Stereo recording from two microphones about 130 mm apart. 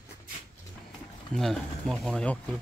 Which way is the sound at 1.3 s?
5° left (ahead or behind).